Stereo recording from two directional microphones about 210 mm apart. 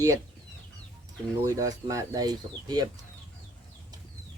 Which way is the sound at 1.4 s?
15° right (ahead or behind).